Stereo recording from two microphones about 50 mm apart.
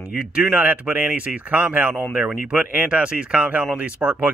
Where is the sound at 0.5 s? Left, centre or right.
Right.